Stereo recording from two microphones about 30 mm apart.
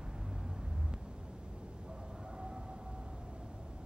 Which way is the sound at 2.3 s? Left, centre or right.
Right.